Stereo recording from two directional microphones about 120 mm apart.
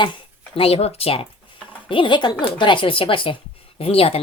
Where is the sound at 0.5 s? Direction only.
55° left (ahead or behind).